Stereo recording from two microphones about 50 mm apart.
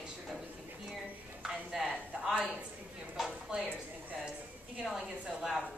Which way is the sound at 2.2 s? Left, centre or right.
Centre.